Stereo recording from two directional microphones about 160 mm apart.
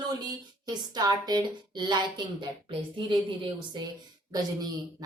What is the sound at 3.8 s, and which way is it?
Speech, 25° right (ahead or behind).